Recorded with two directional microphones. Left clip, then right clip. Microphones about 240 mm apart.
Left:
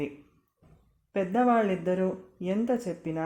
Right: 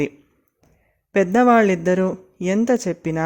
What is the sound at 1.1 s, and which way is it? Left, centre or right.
Speech, right.